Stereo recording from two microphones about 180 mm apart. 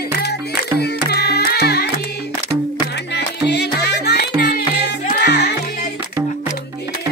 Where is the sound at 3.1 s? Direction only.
65° left (ahead or behind).